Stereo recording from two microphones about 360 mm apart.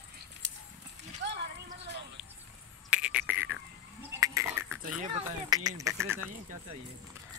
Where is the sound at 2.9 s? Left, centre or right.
Centre.